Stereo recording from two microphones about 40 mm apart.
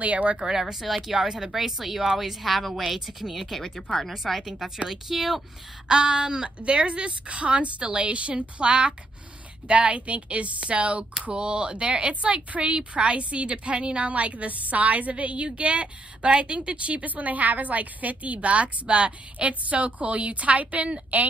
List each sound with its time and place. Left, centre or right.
0.0 s a woman's voice: right
0.4 s a woman's voice: centre
1.2 s speech: centre
1.5 s a woman's voice: centre
3.6 s speech: centre
4.1 s a woman's voice: centre
5.9 s a woman's voice: centre; by 21.3 s right